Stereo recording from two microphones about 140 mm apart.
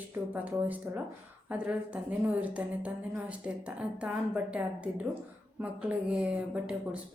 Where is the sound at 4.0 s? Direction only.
10° right (ahead or behind).